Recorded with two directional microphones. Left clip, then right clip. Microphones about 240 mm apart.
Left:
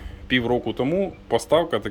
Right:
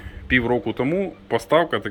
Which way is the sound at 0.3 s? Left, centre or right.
Centre.